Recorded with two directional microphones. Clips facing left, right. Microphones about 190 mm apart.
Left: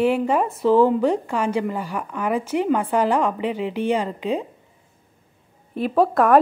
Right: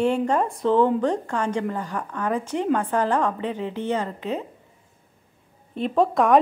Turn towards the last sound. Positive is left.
turn(degrees=5)  # may be behind; listen again after turning